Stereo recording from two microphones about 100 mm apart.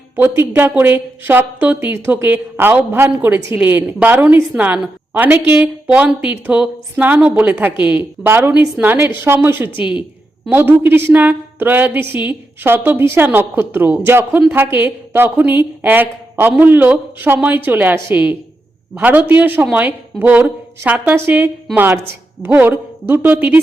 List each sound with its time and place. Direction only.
0.2 s a woman's voice: 20° right (ahead or behind)